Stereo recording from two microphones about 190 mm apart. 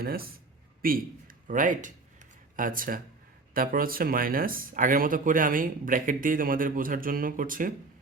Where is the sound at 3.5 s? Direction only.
50° right (ahead or behind).